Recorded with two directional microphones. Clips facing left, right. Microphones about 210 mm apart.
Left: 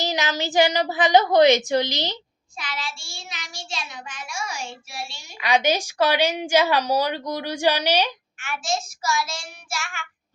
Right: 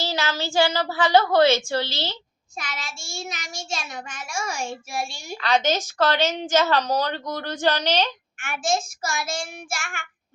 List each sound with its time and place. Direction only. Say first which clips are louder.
0.0 s a woman's voice: left 1 dB; 15° left (ahead or behind)
2.6 s child singing: left 1 dB; 45° right (ahead or behind)
5.4 s a woman's voice: left 1 dB; 10° left (ahead or behind)
8.4 s child singing: right 3 dB; 50° right (ahead or behind)